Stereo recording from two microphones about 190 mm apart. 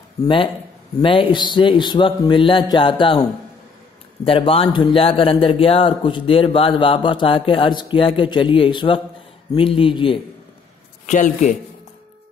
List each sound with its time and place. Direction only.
0.2 s a man's voice: 25° left (ahead or behind)
11.1 s a man's voice: 40° left (ahead or behind)